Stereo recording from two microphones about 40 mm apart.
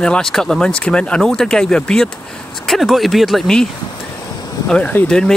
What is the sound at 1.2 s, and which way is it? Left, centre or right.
Speech, centre.